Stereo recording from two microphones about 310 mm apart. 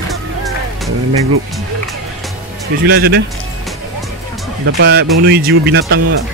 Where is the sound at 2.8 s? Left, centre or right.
Right.